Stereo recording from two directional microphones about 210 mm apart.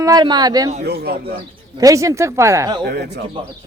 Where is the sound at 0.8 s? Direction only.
50° right (ahead or behind).